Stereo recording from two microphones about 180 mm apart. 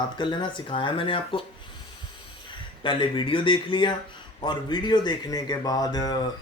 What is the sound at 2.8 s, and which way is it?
Speech, 25° left (ahead or behind).